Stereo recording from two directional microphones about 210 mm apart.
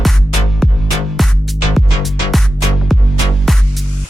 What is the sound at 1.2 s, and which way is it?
Music, centre (ahead or behind).